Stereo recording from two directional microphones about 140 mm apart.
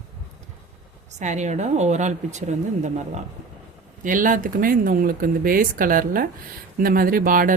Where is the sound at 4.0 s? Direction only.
70° right (ahead or behind).